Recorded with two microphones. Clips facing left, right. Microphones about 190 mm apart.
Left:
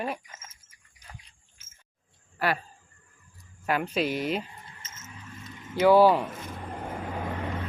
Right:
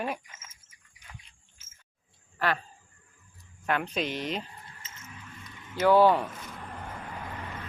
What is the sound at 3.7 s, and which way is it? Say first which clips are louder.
Speech: left 3 dB; 5° left (ahead or behind).